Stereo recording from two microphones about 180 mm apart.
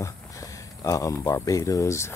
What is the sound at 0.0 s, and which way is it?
Speech, 20° left (ahead or behind).